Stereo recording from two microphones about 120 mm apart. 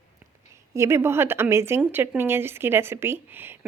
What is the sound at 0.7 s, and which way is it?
Speech, 20° right (ahead or behind).